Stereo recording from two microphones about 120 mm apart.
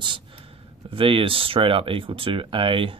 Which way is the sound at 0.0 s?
45° right (ahead or behind).